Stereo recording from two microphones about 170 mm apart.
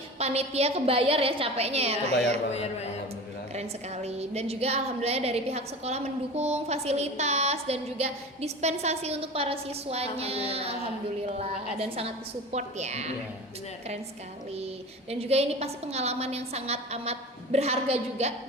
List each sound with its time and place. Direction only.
0.2 s a woman's voice: 40° right (ahead or behind)
3.5 s a woman's voice: 40° right (ahead or behind)
15.2 s a woman's voice: 35° right (ahead or behind)